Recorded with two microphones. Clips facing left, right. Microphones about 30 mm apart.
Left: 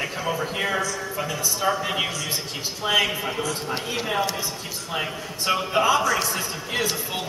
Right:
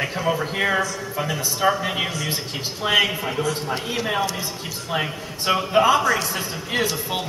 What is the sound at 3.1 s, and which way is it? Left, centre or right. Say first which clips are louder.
Speech: right 2 dB; centre.